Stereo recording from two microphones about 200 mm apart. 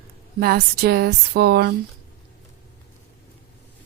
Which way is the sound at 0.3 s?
50° right (ahead or behind).